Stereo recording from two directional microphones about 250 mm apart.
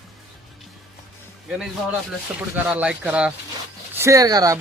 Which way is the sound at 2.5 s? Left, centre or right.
Centre.